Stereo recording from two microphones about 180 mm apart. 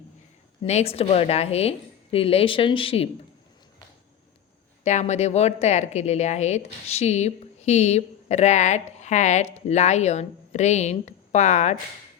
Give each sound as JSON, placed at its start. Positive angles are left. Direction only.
{"t": 0.6, "sound": "a woman's voice", "side_deg": 35}
{"t": 4.8, "sound": "a woman's voice", "side_deg": 40}